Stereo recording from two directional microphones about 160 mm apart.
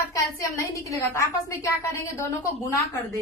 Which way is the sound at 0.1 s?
20° left (ahead or behind).